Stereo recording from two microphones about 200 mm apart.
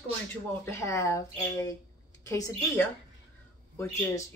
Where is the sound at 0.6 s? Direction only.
15° left (ahead or behind).